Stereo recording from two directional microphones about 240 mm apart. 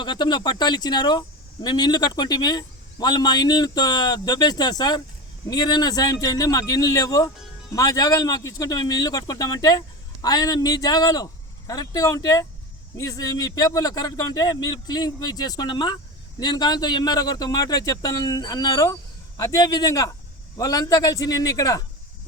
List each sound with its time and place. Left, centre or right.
0.0 s a man's voice: centre